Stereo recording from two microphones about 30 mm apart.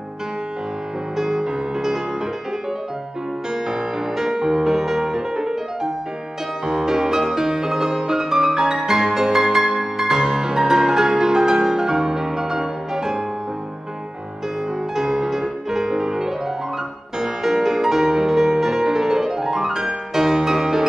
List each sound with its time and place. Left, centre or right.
1.1 s music: right
3.6 s music: right
6.6 s music: right
15.0 s music: centre